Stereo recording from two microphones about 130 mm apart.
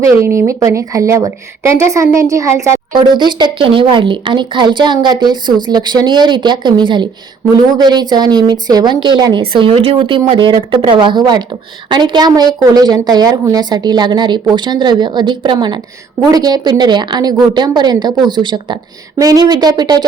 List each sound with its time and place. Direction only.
0.0 s speech: 20° right (ahead or behind)
3.1 s a woman's voice: 35° right (ahead or behind)